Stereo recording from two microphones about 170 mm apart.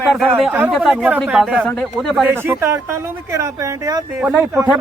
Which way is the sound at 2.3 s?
15° right (ahead or behind).